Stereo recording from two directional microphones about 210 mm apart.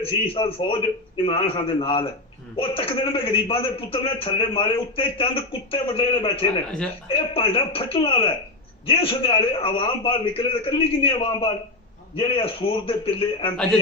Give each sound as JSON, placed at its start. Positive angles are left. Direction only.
{"t": 0.3, "sound": "a man's voice", "side_deg": 25}